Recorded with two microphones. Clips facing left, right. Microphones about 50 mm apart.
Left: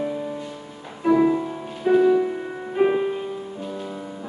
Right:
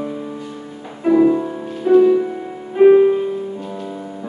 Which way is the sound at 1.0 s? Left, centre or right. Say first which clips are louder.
Right 5 dB; centre.